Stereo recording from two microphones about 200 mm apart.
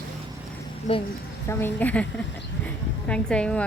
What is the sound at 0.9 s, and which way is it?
Speech, 35° left (ahead or behind).